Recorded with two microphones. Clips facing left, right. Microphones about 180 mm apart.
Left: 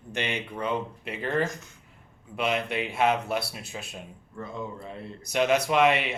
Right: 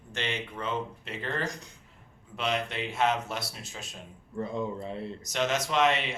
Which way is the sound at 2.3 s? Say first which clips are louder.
Left 3 dB; 10° left (ahead or behind).